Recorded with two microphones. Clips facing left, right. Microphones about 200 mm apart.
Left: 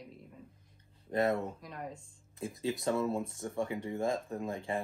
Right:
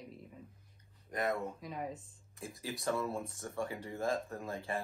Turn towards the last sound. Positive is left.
turn(degrees=15)  # may be behind; listen again after turning